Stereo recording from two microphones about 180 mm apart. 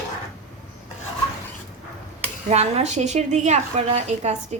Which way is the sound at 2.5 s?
35° right (ahead or behind).